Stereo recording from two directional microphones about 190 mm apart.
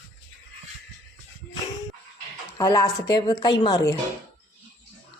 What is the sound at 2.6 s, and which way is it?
A woman's voice, 20° left (ahead or behind).